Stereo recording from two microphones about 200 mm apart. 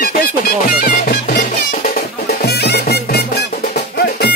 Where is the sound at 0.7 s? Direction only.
45° left (ahead or behind).